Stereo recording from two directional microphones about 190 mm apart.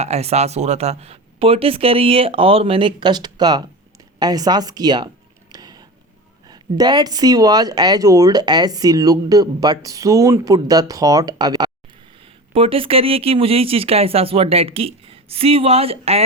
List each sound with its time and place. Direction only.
0.0 s speech: 35° right (ahead or behind)